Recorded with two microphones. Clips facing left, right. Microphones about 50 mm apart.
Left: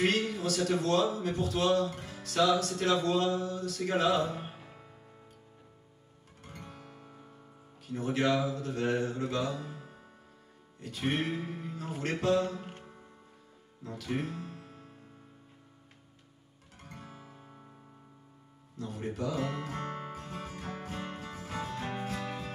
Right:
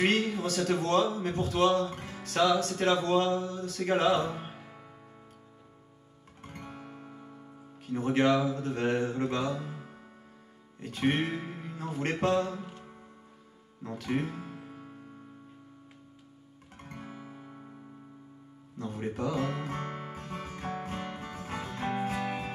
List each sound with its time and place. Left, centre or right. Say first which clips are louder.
0.0 s a man's voice: right 2 dB; right
6.4 s music: right 4 dB; right
7.8 s speech: right 4 dB; right
13.8 s speech: right 3 dB; right
16.8 s music: right 5 dB; right
18.8 s speech: right 3 dB; right
19.1 s music: right 2 dB; right